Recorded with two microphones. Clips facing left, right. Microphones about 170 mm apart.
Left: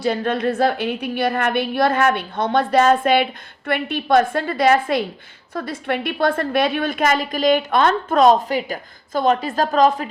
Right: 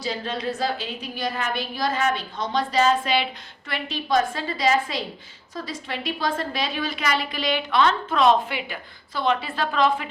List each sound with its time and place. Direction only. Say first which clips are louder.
0.0 s a woman's voice: left 8 dB; 55° left (ahead or behind); by 10.1 s 40° left (ahead or behind)